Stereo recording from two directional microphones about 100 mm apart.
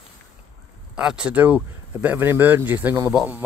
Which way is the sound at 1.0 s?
5° right (ahead or behind).